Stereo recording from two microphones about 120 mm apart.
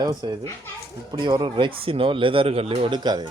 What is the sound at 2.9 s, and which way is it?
Speech, 35° right (ahead or behind).